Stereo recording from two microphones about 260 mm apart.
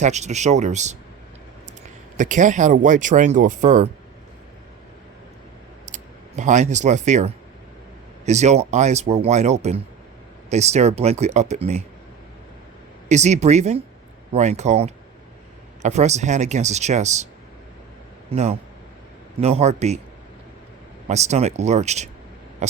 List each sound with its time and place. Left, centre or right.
0.0 s speech: right
2.1 s speech: right
5.8 s speech: right
13.1 s speech: right
18.3 s speech: right
21.1 s speech: right